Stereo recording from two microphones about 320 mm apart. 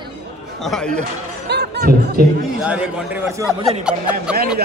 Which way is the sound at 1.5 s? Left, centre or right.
Right.